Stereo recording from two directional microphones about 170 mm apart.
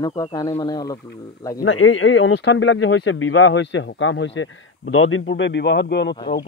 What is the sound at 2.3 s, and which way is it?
Speech, 90° left.